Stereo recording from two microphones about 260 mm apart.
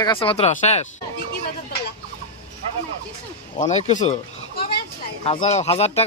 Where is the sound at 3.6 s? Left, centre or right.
Left.